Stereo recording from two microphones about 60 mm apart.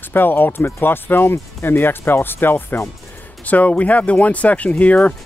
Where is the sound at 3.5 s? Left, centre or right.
Left.